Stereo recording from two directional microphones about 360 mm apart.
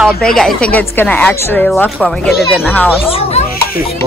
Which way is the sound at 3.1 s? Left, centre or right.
Centre.